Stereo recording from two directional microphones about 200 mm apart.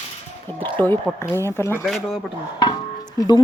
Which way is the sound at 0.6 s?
10° left (ahead or behind).